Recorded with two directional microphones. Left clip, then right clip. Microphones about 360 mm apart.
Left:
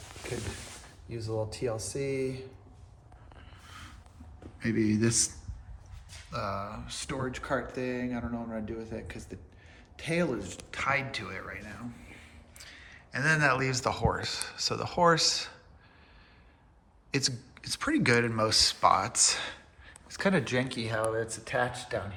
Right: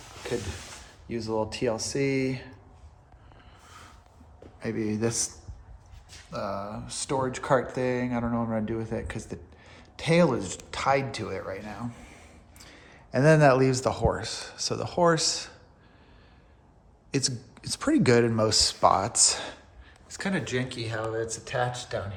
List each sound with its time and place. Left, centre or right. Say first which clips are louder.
1.1 s speech: right 6 dB; right
6.3 s speech: right 2 dB; centre
17.1 s speech: right 1 dB; centre